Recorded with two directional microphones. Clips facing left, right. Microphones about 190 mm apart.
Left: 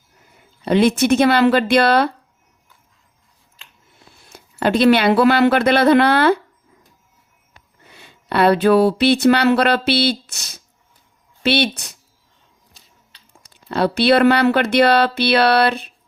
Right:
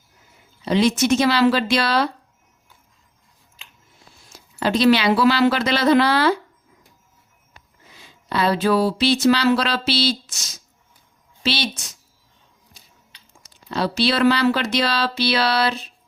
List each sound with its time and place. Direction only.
0.6 s speech: 55° left (ahead or behind)
4.1 s speech: 60° left (ahead or behind)
7.9 s speech: 65° left (ahead or behind)
13.5 s speech: 55° left (ahead or behind)